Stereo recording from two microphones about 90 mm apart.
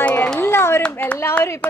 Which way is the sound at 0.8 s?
15° left (ahead or behind).